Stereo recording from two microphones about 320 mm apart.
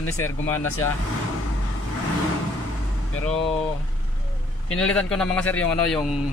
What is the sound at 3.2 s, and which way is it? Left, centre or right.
Speech, centre.